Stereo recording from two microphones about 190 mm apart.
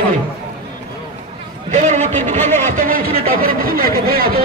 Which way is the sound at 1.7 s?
40° right (ahead or behind).